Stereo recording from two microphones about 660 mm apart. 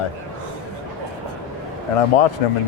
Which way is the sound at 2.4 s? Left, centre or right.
Left.